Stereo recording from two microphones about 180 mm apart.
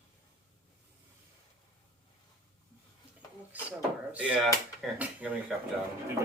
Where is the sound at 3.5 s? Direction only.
10° right (ahead or behind).